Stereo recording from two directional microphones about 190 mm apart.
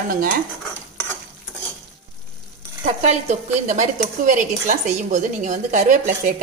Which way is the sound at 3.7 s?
45° right (ahead or behind).